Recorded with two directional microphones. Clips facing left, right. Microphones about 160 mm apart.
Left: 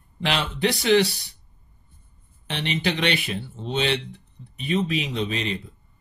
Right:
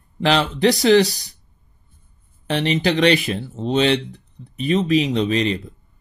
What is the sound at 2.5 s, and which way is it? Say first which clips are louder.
Speech: right 7 dB; 35° right (ahead or behind).